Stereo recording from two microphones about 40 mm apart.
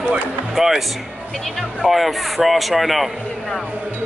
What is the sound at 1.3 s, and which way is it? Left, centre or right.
Speech, centre.